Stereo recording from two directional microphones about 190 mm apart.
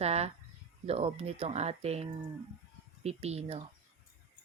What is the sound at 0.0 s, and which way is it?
A woman's voice, 35° right (ahead or behind).